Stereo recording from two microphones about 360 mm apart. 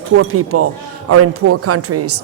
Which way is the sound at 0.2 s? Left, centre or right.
Right.